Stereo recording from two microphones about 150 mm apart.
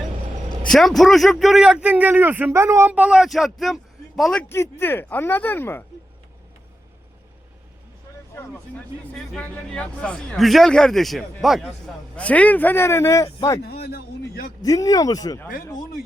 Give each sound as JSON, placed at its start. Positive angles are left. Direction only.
{"t": 0.7, "sound": "a man's voice", "side_deg": 0}
{"t": 4.4, "sound": "speech", "side_deg": 15}
{"t": 8.4, "sound": "a man's voice", "side_deg": 10}
{"t": 13.6, "sound": "a man's voice", "side_deg": 90}
{"t": 14.6, "sound": "speech", "side_deg": 25}